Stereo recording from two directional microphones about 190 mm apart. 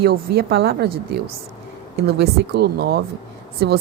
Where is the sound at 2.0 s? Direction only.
60° right (ahead or behind).